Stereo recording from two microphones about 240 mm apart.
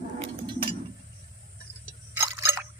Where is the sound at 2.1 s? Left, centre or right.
Centre.